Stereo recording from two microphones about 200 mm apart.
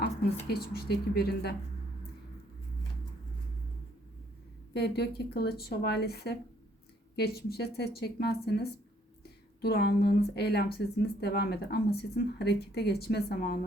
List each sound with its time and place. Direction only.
0.0 s speech: 50° left (ahead or behind)
4.7 s speech: 55° left (ahead or behind)